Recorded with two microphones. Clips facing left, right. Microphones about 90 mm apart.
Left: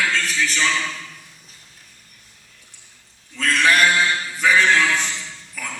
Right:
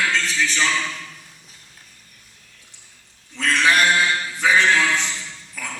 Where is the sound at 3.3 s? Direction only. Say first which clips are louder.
Even; 20° right (ahead or behind).